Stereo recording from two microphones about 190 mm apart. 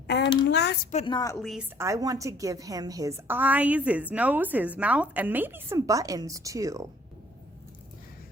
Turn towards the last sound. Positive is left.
turn(degrees=-15)  # may be behind; listen again after turning